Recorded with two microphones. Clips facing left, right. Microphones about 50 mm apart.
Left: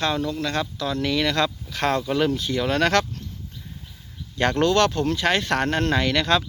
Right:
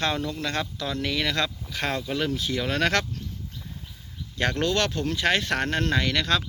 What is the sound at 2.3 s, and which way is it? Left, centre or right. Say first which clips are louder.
Speech: left 4 dB; centre.